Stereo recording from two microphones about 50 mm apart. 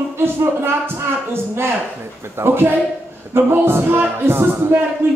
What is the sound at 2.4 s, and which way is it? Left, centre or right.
Speech, right.